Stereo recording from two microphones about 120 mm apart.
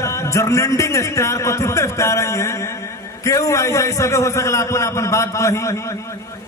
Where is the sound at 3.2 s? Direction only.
25° left (ahead or behind).